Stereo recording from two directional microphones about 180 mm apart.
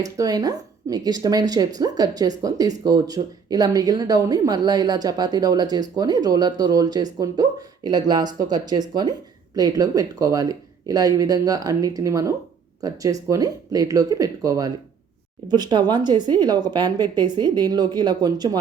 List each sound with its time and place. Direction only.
0.0 s speech: 20° right (ahead or behind)